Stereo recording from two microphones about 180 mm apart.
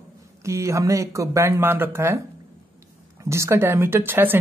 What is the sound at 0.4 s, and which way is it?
Speech, 15° right (ahead or behind).